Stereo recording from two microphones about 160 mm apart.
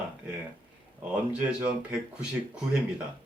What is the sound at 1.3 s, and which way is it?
Speech, 10° right (ahead or behind).